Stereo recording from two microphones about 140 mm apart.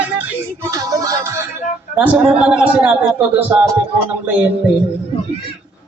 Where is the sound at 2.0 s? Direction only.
10° right (ahead or behind).